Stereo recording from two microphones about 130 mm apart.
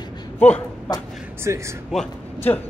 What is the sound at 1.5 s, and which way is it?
Speech, 25° right (ahead or behind).